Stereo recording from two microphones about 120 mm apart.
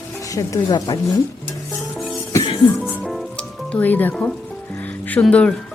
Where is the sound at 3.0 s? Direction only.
Centre (ahead or behind).